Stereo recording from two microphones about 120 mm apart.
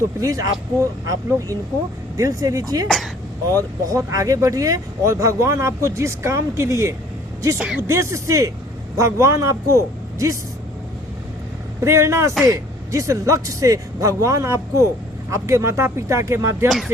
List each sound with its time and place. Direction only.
0.2 s speech: 30° right (ahead or behind)
2.8 s speech: centre (ahead or behind)
3.5 s speech: 25° right (ahead or behind)
11.8 s speech: 25° right (ahead or behind)
16.6 s speech: centre (ahead or behind)